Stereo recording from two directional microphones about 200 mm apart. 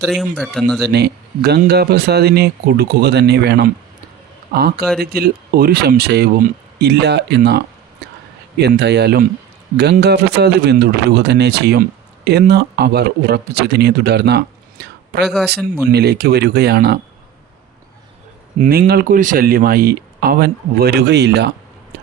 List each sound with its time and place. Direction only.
0.0 s speech: centre (ahead or behind)
0.9 s a man's voice: 55° right (ahead or behind)
18.6 s speech: 50° right (ahead or behind)